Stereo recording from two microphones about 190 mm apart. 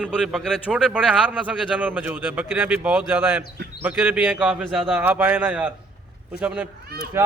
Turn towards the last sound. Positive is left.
turn(degrees=-15)  # may be behind; listen again after turning